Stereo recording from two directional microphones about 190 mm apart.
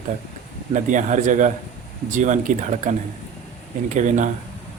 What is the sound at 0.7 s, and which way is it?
Speech, 40° right (ahead or behind).